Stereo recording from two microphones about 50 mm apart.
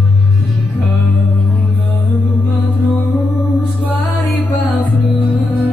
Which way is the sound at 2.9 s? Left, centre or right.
Left.